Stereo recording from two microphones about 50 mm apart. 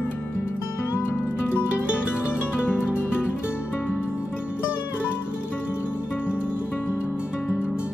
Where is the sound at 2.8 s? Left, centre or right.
Right.